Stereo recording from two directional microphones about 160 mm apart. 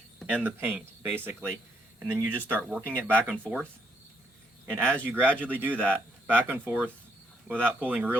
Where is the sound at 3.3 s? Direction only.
5° left (ahead or behind).